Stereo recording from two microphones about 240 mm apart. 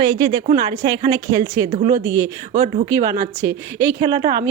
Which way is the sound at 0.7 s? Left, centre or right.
Centre.